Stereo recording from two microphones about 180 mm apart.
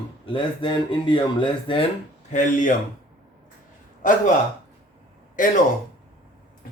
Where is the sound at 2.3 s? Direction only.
45° left (ahead or behind).